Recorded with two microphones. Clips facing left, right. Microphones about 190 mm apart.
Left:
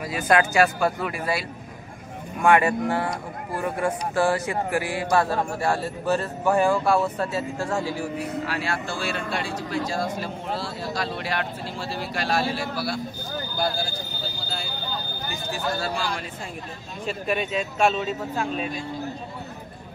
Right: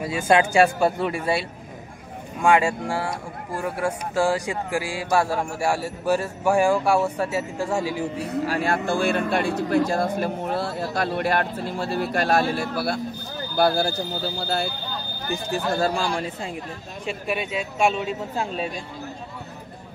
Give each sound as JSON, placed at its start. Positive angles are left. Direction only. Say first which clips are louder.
{"t": 0.0, "sound": "speech", "louder": "right 2 dB", "side_deg": -25}
{"t": 2.4, "sound": "speech", "louder": "even", "side_deg": -10}
{"t": 8.5, "sound": "speech", "louder": "right 5 dB", "side_deg": -50}
{"t": 13.6, "sound": "speech", "louder": "right 8 dB", "side_deg": -65}
{"t": 15.5, "sound": "speech", "louder": "right 5 dB", "side_deg": -45}
{"t": 17.3, "sound": "speech", "louder": "left 2 dB", "side_deg": -10}
{"t": 18.3, "sound": "speech", "louder": "even", "side_deg": -30}